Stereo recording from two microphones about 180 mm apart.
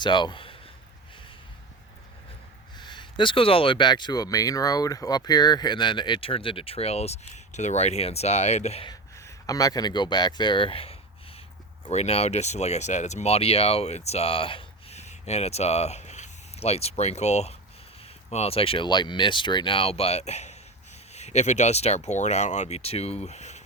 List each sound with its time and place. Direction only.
0.0 s speech: 25° left (ahead or behind)
2.7 s speech: 25° left (ahead or behind)
8.9 s speech: 15° left (ahead or behind); by 23.6 s 40° left (ahead or behind)